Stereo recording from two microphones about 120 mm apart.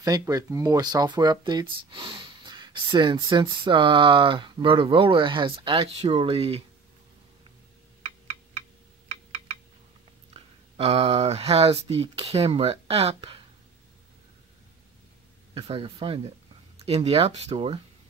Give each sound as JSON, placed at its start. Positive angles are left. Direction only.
{"t": 0.0, "sound": "speech", "side_deg": -30}
{"t": 5.9, "sound": "speech", "side_deg": -55}
{"t": 10.3, "sound": "speech", "side_deg": -55}
{"t": 15.5, "sound": "speech", "side_deg": -50}